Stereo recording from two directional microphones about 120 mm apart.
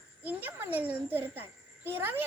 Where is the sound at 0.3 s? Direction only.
15° right (ahead or behind).